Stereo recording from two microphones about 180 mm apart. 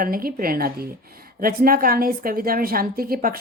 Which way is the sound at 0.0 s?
55° right (ahead or behind).